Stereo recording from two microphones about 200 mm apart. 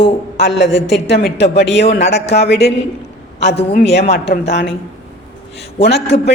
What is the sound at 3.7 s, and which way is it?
A woman's voice, 55° left (ahead or behind).